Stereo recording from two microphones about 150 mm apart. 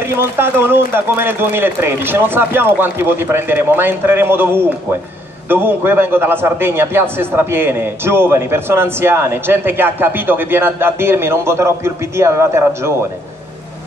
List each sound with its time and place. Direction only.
0.0 s a man's voice: 15° right (ahead or behind)